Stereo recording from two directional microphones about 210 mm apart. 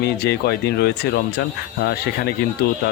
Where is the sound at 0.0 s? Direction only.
50° left (ahead or behind).